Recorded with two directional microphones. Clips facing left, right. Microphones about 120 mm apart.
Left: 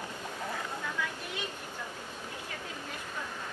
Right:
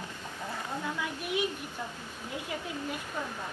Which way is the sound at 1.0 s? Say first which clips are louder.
Right 6 dB; 15° right (ahead or behind).